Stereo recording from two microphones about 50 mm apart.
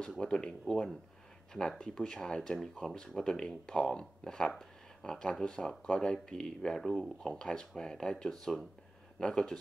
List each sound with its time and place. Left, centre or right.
0.2 s speech: centre